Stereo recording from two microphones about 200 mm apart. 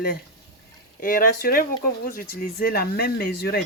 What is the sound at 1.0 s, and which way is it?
Speech, 45° left (ahead or behind).